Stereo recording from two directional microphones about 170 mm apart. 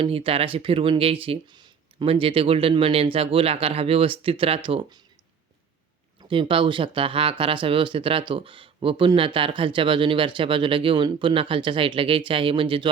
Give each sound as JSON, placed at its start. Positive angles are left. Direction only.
{"t": 0.0, "sound": "speech", "side_deg": -35}
{"t": 6.2, "sound": "speech", "side_deg": -30}